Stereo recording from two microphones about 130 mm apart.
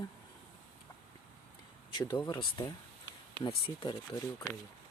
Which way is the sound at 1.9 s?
30° left (ahead or behind).